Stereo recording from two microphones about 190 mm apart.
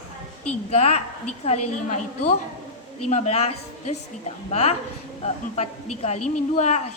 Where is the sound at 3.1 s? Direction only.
35° left (ahead or behind).